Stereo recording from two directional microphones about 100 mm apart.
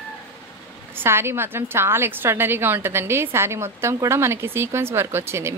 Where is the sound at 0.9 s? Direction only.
25° right (ahead or behind).